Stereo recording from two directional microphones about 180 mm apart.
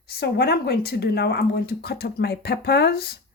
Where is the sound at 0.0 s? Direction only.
60° left (ahead or behind).